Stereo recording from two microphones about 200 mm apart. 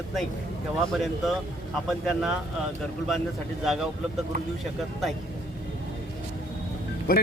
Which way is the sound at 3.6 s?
Centre (ahead or behind).